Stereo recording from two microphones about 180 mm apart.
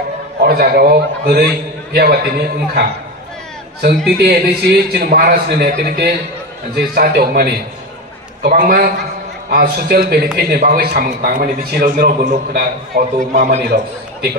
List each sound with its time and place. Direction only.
0.4 s a man's voice: 60° right (ahead or behind)
4.2 s a man's voice: 60° right (ahead or behind)
13.3 s a man's voice: 40° right (ahead or behind)